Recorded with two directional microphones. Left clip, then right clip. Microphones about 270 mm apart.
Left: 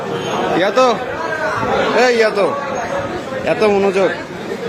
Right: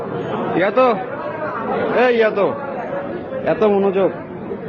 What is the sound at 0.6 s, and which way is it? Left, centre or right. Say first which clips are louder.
Speech: left 1 dB; centre.